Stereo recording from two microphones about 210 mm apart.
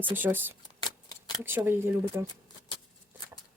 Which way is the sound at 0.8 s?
20° left (ahead or behind).